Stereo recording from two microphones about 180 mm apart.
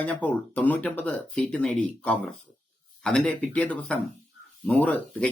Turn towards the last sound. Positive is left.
turn(degrees=10)  # may be behind; listen again after turning